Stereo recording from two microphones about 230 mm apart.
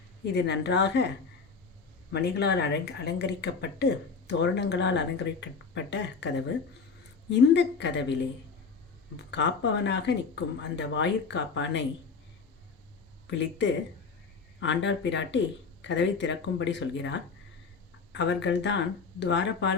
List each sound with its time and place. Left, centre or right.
0.3 s speech: left
2.1 s speech: left
7.3 s speech: left
9.3 s speech: left
13.3 s speech: left